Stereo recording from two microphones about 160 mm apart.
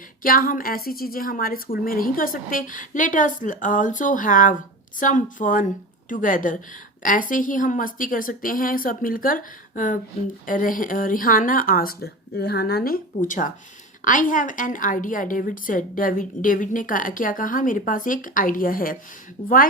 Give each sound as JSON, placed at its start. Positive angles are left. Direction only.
{"t": 0.2, "sound": "a woman's voice", "side_deg": 60}
{"t": 13.2, "sound": "a woman's voice", "side_deg": 55}
{"t": 19.4, "sound": "a woman's voice", "side_deg": 40}